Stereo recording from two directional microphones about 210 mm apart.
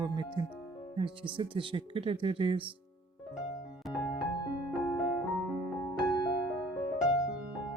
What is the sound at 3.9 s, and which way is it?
Music, centre (ahead or behind).